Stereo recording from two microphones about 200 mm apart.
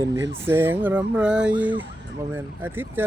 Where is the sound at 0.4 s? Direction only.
10° right (ahead or behind).